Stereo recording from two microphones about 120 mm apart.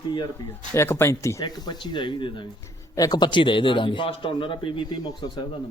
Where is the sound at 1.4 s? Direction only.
40° left (ahead or behind).